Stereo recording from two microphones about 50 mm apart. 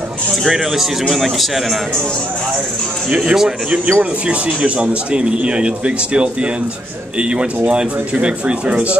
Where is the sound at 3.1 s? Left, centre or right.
Centre.